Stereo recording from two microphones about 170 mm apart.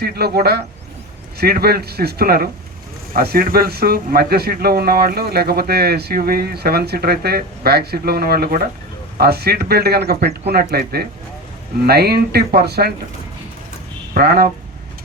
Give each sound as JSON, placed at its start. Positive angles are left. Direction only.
{"t": 0.0, "sound": "speech", "side_deg": -65}
{"t": 14.1, "sound": "speech", "side_deg": -65}